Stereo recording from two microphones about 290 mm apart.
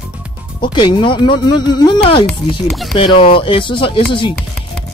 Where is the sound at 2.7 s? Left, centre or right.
Centre.